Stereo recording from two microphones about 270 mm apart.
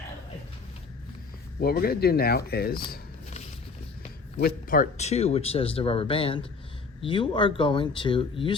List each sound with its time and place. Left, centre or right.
1.6 s speech: left
2.9 s shuffling cards: left
4.4 s speech: left